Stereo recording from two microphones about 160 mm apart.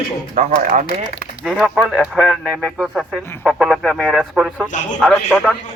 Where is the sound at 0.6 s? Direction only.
55° right (ahead or behind).